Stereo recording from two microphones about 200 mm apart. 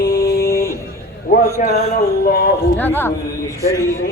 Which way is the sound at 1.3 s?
45° left (ahead or behind).